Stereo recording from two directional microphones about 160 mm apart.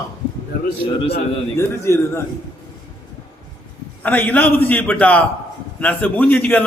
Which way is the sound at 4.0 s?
10° left (ahead or behind).